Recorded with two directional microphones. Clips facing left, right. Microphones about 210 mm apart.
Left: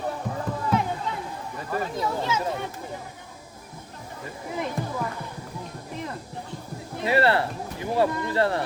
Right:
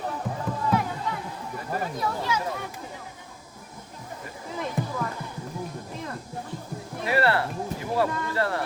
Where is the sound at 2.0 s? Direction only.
25° left (ahead or behind).